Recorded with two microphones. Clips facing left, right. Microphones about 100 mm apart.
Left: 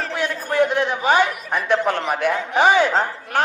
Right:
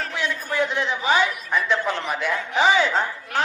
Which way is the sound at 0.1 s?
50° left (ahead or behind).